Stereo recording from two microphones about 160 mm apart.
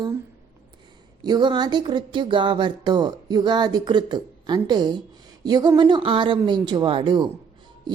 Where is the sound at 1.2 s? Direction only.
25° right (ahead or behind).